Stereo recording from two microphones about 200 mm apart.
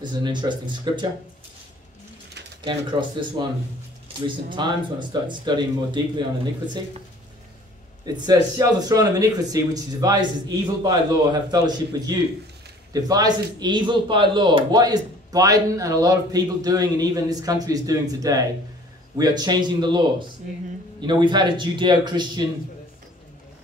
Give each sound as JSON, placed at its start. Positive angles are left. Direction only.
{"t": 0.0, "sound": "speech", "side_deg": -20}
{"t": 2.6, "sound": "speech", "side_deg": -20}
{"t": 4.5, "sound": "speech", "side_deg": -25}
{"t": 8.0, "sound": "speech", "side_deg": -20}